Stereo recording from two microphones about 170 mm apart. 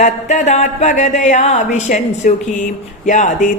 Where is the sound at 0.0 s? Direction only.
45° left (ahead or behind).